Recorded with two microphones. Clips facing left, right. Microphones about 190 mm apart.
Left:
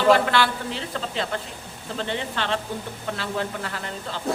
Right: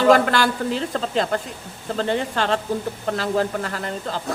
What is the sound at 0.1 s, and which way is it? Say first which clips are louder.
Speech: left 1 dB; 45° right (ahead or behind).